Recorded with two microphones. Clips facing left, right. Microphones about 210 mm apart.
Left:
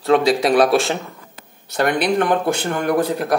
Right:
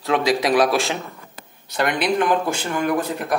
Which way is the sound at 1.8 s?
55° left (ahead or behind).